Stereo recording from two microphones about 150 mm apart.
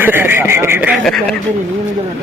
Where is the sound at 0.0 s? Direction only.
15° right (ahead or behind).